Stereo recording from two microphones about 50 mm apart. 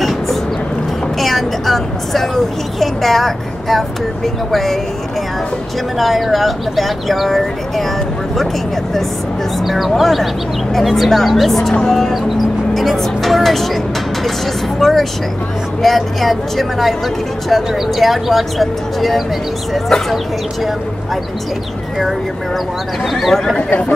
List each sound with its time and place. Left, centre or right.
1.2 s vehicle: centre
2.8 s speech: centre
5.9 s speech: centre
9.6 s speech: centre
19.9 s speech: centre
23.0 s speech: centre